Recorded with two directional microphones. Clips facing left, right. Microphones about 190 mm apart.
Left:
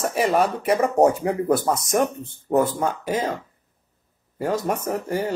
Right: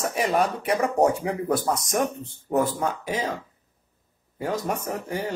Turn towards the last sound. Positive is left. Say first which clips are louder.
# left 4 dB
turn(degrees=5)  # may be behind; listen again after turning